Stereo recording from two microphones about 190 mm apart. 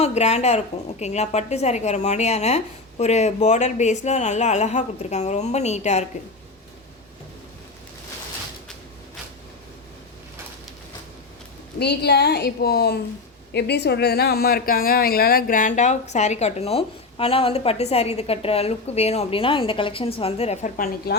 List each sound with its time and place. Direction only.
0.0 s speech: 35° left (ahead or behind)
11.8 s a woman's voice: 60° left (ahead or behind)